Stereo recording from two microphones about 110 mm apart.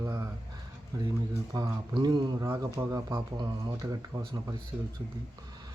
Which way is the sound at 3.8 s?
25° right (ahead or behind).